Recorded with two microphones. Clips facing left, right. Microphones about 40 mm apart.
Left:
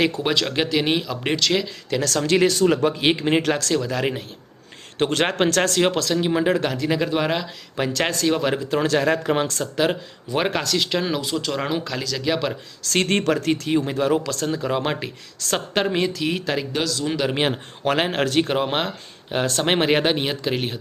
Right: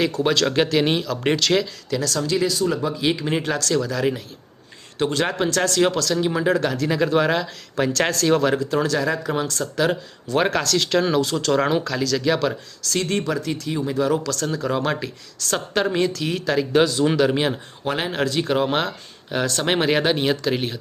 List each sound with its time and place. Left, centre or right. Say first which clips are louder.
0.2 s speech: right 3 dB; centre
1.9 s speech: left 3 dB; left
4.9 s speech: left 1 dB; left
5.8 s speech: right 1 dB; left; by 8.4 s centre
8.7 s speech: left 2 dB; left
10.3 s speech: right 2 dB; centre
12.9 s speech: left 3 dB; left; by 16.6 s centre
16.8 s speech: right 6 dB; right
17.3 s speech: even; left
18.5 s speech: right 2 dB; centre